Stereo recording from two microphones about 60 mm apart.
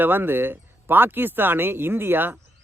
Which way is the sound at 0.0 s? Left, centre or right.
Right.